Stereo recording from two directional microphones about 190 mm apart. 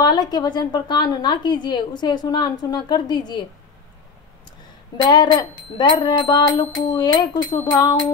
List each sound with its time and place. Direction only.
0.0 s a woman's voice: 20° left (ahead or behind)
5.0 s a woman's voice: 25° left (ahead or behind)